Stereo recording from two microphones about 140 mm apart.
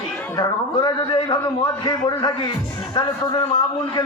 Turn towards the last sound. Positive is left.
turn(degrees=30)  # may be behind; listen again after turning